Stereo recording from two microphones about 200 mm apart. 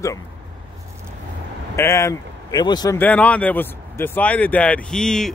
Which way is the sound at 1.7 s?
15° left (ahead or behind).